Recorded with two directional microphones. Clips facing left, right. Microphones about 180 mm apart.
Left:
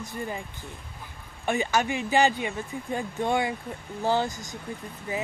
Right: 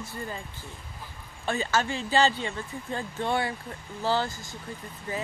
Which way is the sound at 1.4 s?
15° left (ahead or behind).